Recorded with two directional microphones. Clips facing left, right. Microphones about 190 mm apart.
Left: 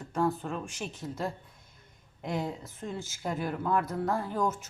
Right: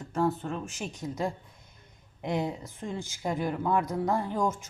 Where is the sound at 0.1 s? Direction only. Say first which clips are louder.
Right 1 dB; centre (ahead or behind).